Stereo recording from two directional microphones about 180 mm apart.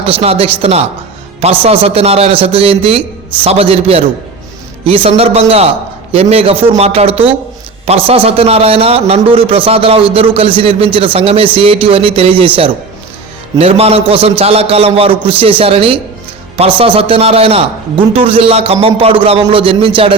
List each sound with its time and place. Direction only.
0.0 s a man's voice: 35° right (ahead or behind)
13.6 s a man's voice: 35° right (ahead or behind)